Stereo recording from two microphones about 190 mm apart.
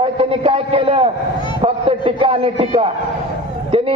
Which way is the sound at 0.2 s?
30° right (ahead or behind).